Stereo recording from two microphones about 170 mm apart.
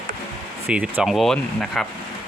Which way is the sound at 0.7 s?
5° right (ahead or behind).